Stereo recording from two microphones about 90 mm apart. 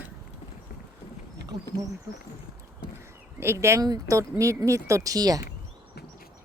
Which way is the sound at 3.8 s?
45° right (ahead or behind).